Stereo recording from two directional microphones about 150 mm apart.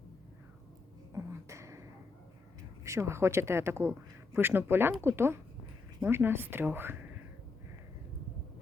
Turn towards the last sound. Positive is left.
turn(degrees=-15)  # may be behind; listen again after turning